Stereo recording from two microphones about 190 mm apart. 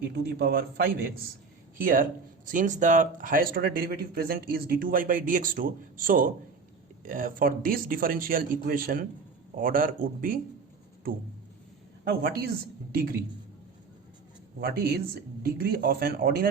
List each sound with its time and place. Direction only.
0.2 s a man's voice: 55° right (ahead or behind)
12.0 s a man's voice: 55° right (ahead or behind)
14.6 s speech: 55° right (ahead or behind)